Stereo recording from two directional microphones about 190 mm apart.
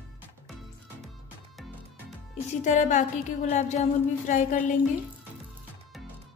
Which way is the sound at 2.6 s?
40° left (ahead or behind).